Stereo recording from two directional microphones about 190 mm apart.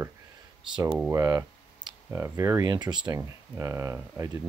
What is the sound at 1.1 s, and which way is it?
Speech, 15° right (ahead or behind).